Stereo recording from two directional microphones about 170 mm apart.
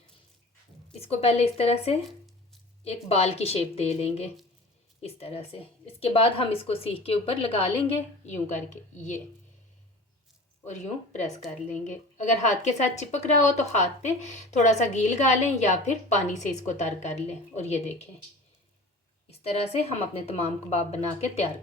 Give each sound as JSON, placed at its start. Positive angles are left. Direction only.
{"t": 0.9, "sound": "a woman's voice", "side_deg": 35}
{"t": 11.7, "sound": "a woman's voice", "side_deg": 45}
{"t": 19.3, "sound": "a woman's voice", "side_deg": 40}